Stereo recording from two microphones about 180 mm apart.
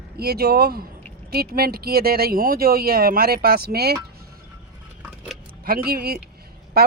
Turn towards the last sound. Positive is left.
turn(degrees=-60)  # may be behind; listen again after turning